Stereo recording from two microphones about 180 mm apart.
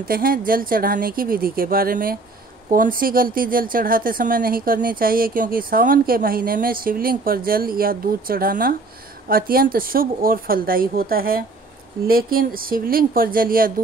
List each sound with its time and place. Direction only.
0.1 s speech: 55° right (ahead or behind)